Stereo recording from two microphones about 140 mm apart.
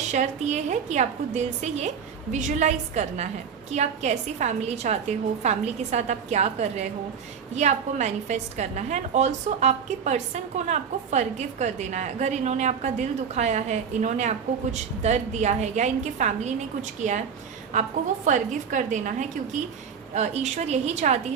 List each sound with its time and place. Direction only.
0.1 s a woman's voice: 55° right (ahead or behind)